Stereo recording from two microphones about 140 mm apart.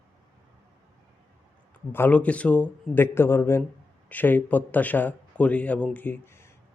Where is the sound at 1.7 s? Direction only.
15° left (ahead or behind).